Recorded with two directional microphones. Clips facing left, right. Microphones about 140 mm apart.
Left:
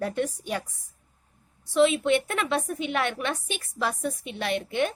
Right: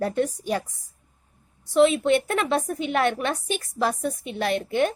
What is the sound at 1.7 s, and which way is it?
A woman's voice, 40° right (ahead or behind).